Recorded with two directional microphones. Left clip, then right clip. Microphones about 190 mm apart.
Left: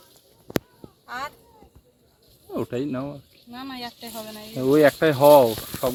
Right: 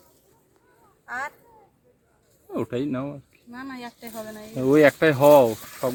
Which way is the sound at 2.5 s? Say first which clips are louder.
Even; 5° right (ahead or behind).